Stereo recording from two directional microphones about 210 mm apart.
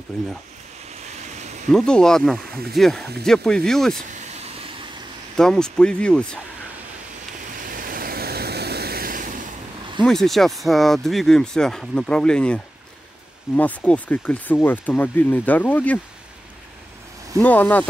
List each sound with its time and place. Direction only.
1.2 s a sound: 35° right (ahead or behind)
1.7 s speech: 5° left (ahead or behind)
4.1 s vehicle: 30° right (ahead or behind)
5.4 s speech: 5° left (ahead or behind)
7.5 s vehicle: 40° right (ahead or behind)
10.0 s speech: centre (ahead or behind)
17.4 s speech: 10° left (ahead or behind)